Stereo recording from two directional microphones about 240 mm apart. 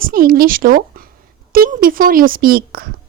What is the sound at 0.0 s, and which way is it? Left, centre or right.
A woman's voice, right.